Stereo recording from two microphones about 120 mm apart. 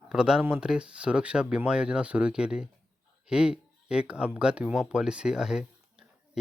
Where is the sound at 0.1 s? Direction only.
5° right (ahead or behind).